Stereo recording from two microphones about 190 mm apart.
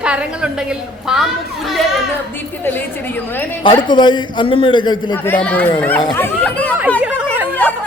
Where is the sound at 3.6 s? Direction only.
25° left (ahead or behind).